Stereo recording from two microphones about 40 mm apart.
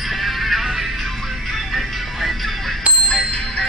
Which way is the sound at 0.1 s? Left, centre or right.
Centre.